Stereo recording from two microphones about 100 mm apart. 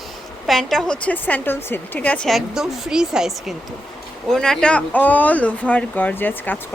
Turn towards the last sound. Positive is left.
turn(degrees=20)  # may be behind; listen again after turning